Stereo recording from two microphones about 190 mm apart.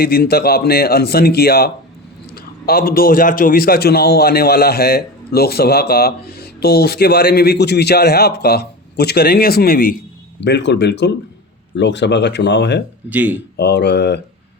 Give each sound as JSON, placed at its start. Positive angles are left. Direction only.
{"t": 0.0, "sound": "a man's voice", "side_deg": 55}
{"t": 10.4, "sound": "a man's voice", "side_deg": 65}
{"t": 13.1, "sound": "speech", "side_deg": -10}
{"t": 13.6, "sound": "a man's voice", "side_deg": 60}